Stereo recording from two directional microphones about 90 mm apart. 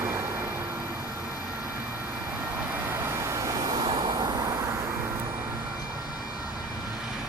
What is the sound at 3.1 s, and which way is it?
Vehicle, 35° right (ahead or behind).